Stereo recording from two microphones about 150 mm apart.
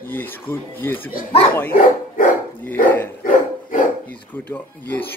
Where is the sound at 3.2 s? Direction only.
65° left (ahead or behind).